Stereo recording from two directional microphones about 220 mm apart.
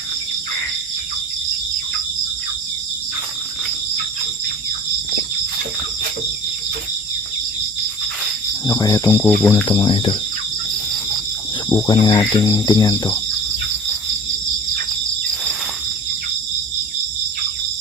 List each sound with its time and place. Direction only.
8.6 s cricket: 15° left (ahead or behind)
9.2 s cricket: 5° left (ahead or behind)
9.6 s speech: 20° left (ahead or behind)
11.9 s speech: 20° left (ahead or behind)